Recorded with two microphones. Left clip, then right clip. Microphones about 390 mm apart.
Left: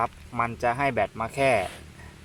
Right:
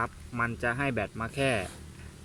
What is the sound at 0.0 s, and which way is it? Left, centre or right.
Speech, centre.